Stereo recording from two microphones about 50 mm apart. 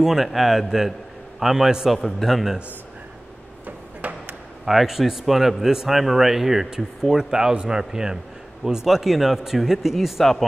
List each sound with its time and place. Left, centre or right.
0.0 s a man's voice: centre
2.0 s speech: centre
3.6 s a sound: right
4.6 s a man's voice: centre